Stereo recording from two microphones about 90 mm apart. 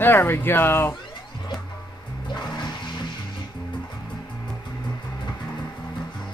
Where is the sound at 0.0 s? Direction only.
25° left (ahead or behind).